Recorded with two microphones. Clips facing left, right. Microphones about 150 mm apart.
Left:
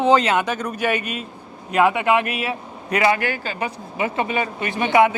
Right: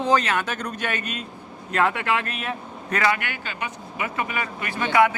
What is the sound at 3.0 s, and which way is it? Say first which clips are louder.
Speech: left 5 dB; 30° left (ahead or behind).